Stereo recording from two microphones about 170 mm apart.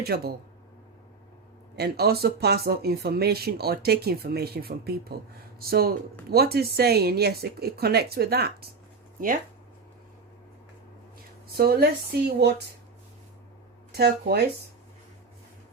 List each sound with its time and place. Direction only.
0.0 s speech: 70° right (ahead or behind)
1.7 s speech: 70° right (ahead or behind)
11.5 s speech: 65° right (ahead or behind)
13.9 s speech: 75° right (ahead or behind)